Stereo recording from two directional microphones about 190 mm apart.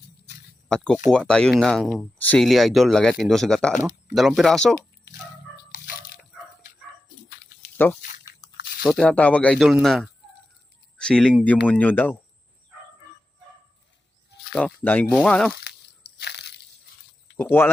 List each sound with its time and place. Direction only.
1.1 s speech: 5° left (ahead or behind)
5.7 s water: 50° left (ahead or behind)
7.8 s a sound: 10° left (ahead or behind)
8.8 s speech: centre (ahead or behind)
14.5 s speech: 5° left (ahead or behind)
16.1 s crushing: 60° left (ahead or behind)
17.3 s speech: 10° left (ahead or behind)